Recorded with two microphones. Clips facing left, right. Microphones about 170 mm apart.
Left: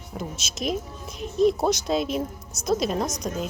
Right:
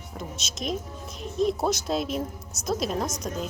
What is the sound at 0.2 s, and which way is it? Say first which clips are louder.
Speech: left 3 dB; 5° left (ahead or behind).